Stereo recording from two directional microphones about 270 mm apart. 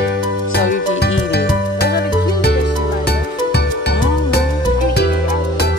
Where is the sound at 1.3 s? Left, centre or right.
Left.